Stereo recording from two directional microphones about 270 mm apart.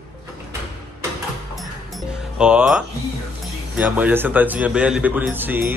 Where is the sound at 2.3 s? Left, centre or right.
Centre.